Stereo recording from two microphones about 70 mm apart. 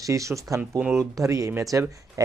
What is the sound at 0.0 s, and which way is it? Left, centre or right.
Speech, right.